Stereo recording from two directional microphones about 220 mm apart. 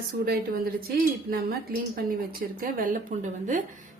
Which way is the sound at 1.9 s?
40° right (ahead or behind).